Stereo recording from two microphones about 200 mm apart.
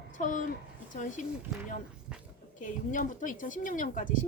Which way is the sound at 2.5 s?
40° left (ahead or behind).